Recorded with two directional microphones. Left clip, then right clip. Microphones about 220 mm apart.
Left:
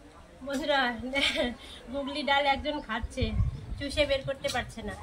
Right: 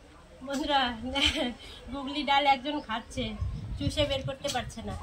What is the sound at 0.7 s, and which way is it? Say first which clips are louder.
A woman's voice: even; 10° left (ahead or behind).